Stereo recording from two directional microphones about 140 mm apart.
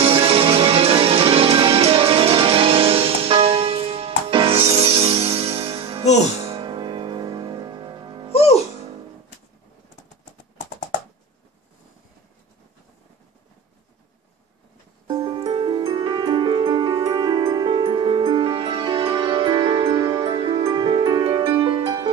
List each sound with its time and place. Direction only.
0.0 s music: 45° right (ahead or behind)
8.3 s music: 45° left (ahead or behind)
15.0 s music: 30° right (ahead or behind)